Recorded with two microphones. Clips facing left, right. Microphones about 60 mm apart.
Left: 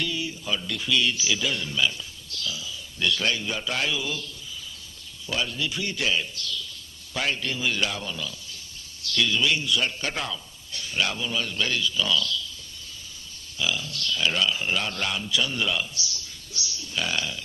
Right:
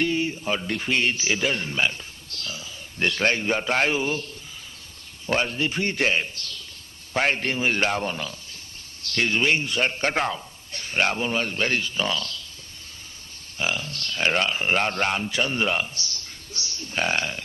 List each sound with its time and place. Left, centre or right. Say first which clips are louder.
0.0 s a man's voice: right 6 dB; right
13.6 s speech: right 1 dB; right